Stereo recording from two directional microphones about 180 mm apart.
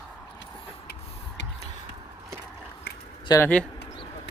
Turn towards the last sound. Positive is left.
turn(degrees=10)  # may be behind; listen again after turning